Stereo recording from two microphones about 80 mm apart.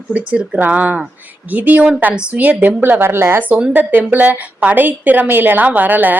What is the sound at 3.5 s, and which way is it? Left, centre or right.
A woman's voice, centre.